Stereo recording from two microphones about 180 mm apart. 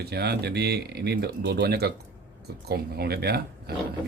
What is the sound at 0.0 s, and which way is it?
Speech, 65° right (ahead or behind).